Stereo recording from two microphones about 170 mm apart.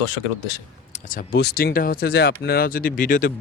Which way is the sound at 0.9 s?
55° left (ahead or behind).